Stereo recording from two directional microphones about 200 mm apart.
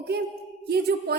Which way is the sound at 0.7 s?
50° right (ahead or behind).